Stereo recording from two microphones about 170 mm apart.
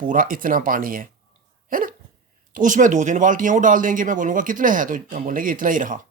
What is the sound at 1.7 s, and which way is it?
Dog, 55° right (ahead or behind).